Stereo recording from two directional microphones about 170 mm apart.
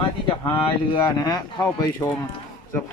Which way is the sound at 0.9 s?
25° left (ahead or behind).